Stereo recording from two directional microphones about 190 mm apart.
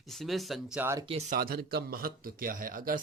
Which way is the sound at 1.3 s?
50° right (ahead or behind).